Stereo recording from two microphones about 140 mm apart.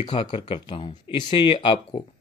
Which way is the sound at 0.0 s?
35° left (ahead or behind).